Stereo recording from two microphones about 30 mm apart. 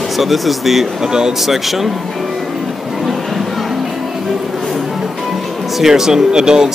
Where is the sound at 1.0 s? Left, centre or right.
Right.